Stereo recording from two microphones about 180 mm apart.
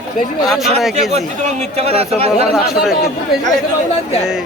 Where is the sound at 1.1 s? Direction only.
35° right (ahead or behind).